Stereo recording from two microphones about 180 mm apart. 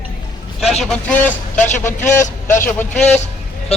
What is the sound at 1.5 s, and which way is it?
Speech, 40° left (ahead or behind).